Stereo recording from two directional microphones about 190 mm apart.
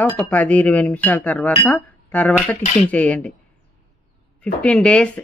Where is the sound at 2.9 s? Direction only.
5° left (ahead or behind).